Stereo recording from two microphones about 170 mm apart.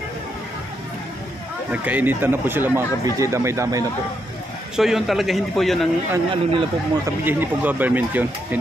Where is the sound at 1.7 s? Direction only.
10° right (ahead or behind).